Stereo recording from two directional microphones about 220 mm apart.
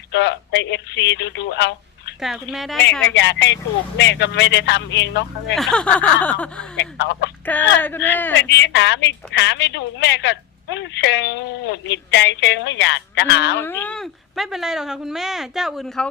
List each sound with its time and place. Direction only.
0.1 s speech: 55° left (ahead or behind)
2.2 s speech: centre (ahead or behind)
3.2 s a woman's voice: 50° left (ahead or behind)
5.5 s speech: centre (ahead or behind)
6.7 s a woman's voice: 55° left (ahead or behind)
7.4 s speech: 10° left (ahead or behind)
8.4 s a woman's voice: 55° left (ahead or behind)
13.6 s speech: 10° left (ahead or behind)